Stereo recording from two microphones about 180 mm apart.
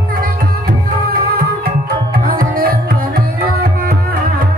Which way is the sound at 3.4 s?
55° right (ahead or behind).